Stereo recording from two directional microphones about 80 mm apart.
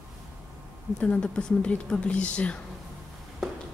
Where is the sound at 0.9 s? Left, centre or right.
Centre.